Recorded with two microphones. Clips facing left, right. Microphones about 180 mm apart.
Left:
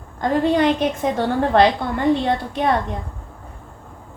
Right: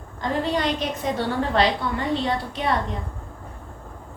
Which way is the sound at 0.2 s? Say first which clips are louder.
Left 7 dB; 55° left (ahead or behind).